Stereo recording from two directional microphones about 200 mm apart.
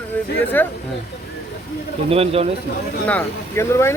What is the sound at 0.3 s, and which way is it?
Speech, 10° left (ahead or behind).